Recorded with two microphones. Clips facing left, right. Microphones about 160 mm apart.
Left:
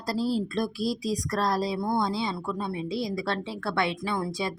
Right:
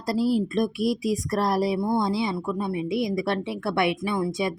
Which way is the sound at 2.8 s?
25° left (ahead or behind).